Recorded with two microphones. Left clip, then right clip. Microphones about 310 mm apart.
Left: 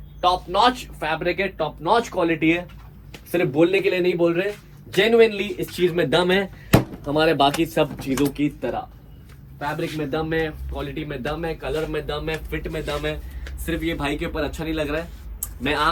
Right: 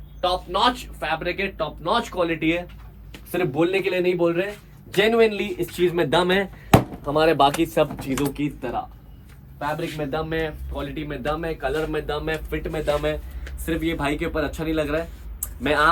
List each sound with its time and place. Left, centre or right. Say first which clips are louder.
0.2 s a man's voice: left 3 dB; centre
10.1 s speech: left 2 dB; centre